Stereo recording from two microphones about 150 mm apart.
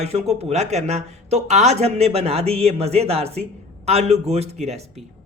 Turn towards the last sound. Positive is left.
turn(degrees=-45)  # may be behind; listen again after turning